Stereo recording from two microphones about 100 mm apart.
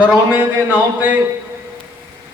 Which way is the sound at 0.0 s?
15° right (ahead or behind).